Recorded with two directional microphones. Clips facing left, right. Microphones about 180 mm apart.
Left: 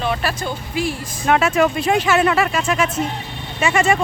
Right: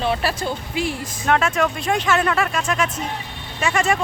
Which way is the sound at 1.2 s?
5° left (ahead or behind).